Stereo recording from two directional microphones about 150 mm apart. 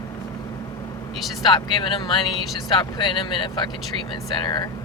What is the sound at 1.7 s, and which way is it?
Speech, 30° left (ahead or behind).